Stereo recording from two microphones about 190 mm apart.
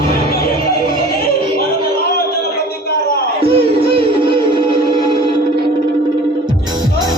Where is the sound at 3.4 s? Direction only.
30° right (ahead or behind).